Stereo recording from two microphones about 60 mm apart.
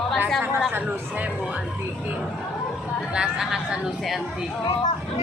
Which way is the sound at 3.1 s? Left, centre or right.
Centre.